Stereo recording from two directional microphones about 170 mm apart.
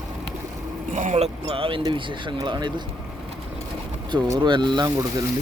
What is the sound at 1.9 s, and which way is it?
Speech, 30° right (ahead or behind).